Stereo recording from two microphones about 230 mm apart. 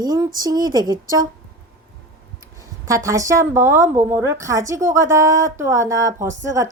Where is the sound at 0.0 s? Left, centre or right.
Centre.